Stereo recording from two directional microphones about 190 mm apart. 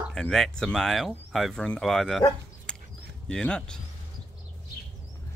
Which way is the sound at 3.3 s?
5° left (ahead or behind).